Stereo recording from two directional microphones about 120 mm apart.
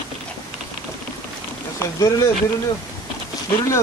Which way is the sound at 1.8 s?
25° left (ahead or behind).